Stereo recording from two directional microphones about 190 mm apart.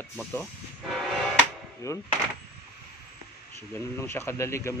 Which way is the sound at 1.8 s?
15° left (ahead or behind).